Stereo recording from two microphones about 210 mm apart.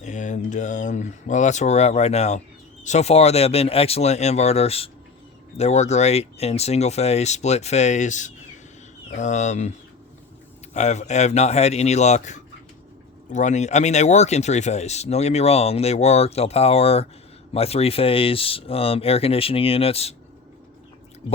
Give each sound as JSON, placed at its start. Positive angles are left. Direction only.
{"t": 0.0, "sound": "speech", "side_deg": 35}
{"t": 10.8, "sound": "speech", "side_deg": 35}